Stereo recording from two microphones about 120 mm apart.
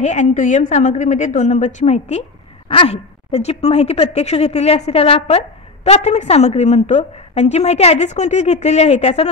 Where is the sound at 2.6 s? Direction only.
50° left (ahead or behind).